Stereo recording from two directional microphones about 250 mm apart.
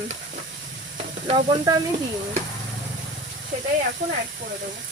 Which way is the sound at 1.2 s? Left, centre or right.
Centre.